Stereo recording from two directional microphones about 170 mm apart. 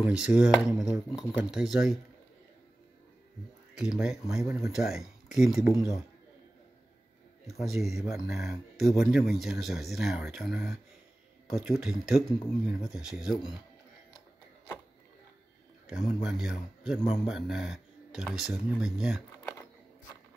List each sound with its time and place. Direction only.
0.0 s speech: 5° right (ahead or behind)
3.7 s speech: 5° right (ahead or behind)
5.7 s a man's voice: 20° left (ahead or behind)
7.6 s speech: centre (ahead or behind)
12.2 s a man's voice: 20° left (ahead or behind)
12.8 s speech: 5° right (ahead or behind)
15.9 s speech: 5° right (ahead or behind)